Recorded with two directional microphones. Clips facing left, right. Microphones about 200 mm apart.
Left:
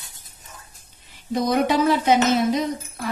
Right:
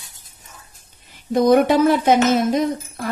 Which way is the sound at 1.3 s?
50° right (ahead or behind).